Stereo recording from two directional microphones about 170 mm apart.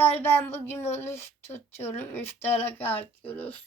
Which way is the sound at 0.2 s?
10° left (ahead or behind).